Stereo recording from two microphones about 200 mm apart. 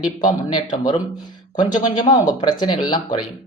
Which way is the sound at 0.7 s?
20° left (ahead or behind).